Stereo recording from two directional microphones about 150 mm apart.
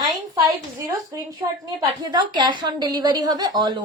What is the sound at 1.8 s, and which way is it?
A woman's voice, 30° right (ahead or behind).